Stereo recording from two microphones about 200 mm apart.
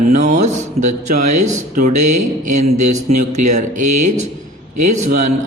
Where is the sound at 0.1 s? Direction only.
40° right (ahead or behind).